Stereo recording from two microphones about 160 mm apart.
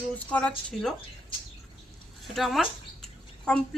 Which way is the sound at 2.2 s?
Centre (ahead or behind).